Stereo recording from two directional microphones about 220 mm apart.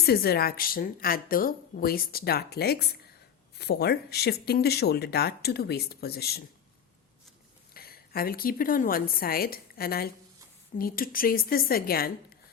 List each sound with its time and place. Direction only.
0.0 s a woman's voice: 45° left (ahead or behind)
7.7 s a woman's voice: 45° left (ahead or behind)